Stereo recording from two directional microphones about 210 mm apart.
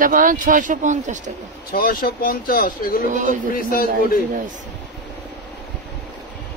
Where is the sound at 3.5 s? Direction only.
45° left (ahead or behind).